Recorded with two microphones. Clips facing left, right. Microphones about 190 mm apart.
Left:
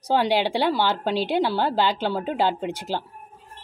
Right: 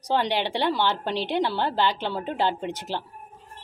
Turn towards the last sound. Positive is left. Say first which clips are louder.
# left 3 dB
turn(degrees=10)  # may be behind; listen again after turning